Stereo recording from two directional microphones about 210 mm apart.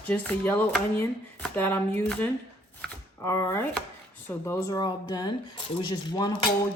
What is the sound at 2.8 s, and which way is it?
Chopping, 10° left (ahead or behind).